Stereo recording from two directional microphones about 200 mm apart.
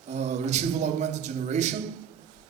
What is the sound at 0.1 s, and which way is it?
A man's voice, 35° right (ahead or behind).